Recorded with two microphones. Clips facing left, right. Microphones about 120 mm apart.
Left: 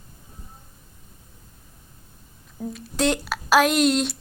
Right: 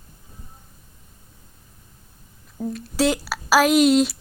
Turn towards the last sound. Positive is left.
turn(degrees=-5)  # may be behind; listen again after turning